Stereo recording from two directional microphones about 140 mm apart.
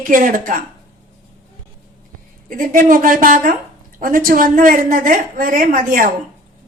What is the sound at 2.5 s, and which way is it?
A woman's voice, 80° right.